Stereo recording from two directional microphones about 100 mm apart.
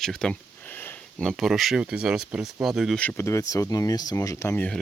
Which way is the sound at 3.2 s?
30° left (ahead or behind).